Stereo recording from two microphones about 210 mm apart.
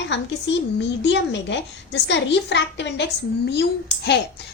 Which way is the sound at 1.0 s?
55° left (ahead or behind).